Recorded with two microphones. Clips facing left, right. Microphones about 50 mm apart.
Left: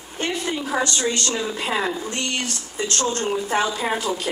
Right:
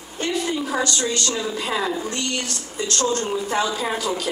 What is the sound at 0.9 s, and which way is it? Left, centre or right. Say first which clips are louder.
A woman's voice: even; left.